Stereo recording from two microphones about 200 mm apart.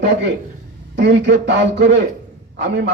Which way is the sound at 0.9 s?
60° right (ahead or behind).